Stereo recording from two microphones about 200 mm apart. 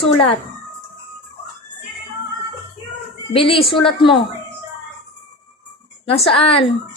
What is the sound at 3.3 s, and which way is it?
A woman's voice, 30° left (ahead or behind).